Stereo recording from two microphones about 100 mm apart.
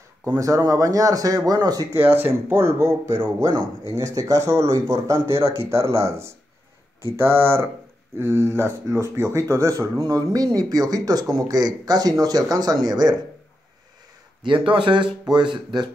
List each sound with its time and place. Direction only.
0.2 s speech: 35° right (ahead or behind)
2.0 s speech: 20° right (ahead or behind); by 13.1 s 40° right (ahead or behind)
14.4 s speech: 55° right (ahead or behind)